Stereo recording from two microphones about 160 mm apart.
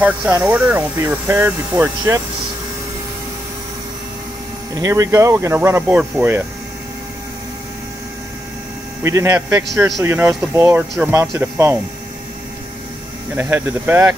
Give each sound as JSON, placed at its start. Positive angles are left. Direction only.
{"t": 0.0, "sound": "speech", "side_deg": -10}
{"t": 4.7, "sound": "speech", "side_deg": -20}
{"t": 9.0, "sound": "speech", "side_deg": -15}
{"t": 13.4, "sound": "speech", "side_deg": -10}